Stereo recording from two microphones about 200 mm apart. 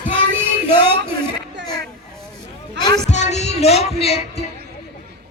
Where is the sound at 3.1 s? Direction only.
35° left (ahead or behind).